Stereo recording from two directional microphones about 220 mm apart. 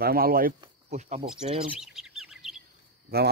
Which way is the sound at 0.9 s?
30° right (ahead or behind).